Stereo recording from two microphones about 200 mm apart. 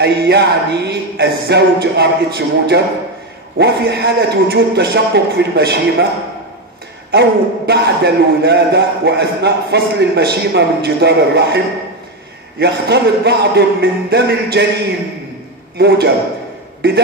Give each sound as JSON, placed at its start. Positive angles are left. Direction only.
{"t": 0.0, "sound": "a man's voice", "side_deg": -55}
{"t": 7.1, "sound": "a man's voice", "side_deg": -55}